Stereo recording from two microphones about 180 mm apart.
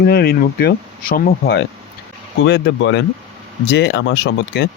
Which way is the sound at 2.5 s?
75° left (ahead or behind).